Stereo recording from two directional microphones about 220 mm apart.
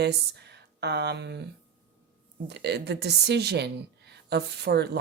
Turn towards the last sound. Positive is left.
turn(degrees=-45)  # may be behind; listen again after turning